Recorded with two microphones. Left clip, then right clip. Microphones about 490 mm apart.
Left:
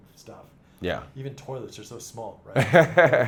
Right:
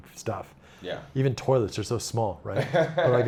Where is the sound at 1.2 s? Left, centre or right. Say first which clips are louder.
Right 12 dB; right.